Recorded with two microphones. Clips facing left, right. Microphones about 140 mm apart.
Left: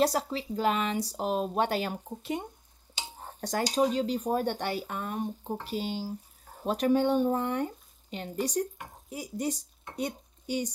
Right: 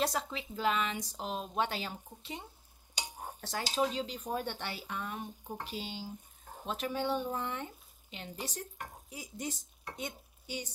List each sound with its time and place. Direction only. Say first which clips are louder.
0.0 s speech: left 7 dB; 35° left (ahead or behind); by 2.5 s 50° left (ahead or behind)
3.0 s dishes: even; 15° right (ahead or behind)
3.3 s a woman's voice: left 7 dB; 40° left (ahead or behind)